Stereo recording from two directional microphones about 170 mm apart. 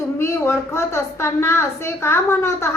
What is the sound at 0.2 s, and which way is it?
A woman's voice, 15° left (ahead or behind).